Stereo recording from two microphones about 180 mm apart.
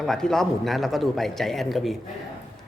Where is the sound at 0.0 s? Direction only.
Centre (ahead or behind).